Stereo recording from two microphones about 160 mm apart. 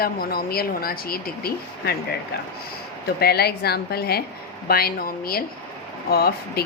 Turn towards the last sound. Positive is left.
turn(degrees=75)  # may be behind; listen again after turning